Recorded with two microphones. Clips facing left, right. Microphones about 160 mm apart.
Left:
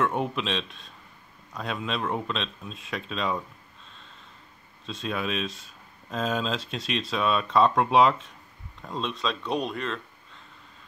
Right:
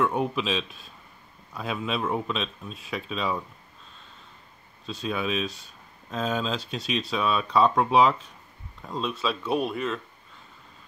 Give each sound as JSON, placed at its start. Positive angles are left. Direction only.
{"t": 0.0, "sound": "speech", "side_deg": 0}
{"t": 4.8, "sound": "speech", "side_deg": 0}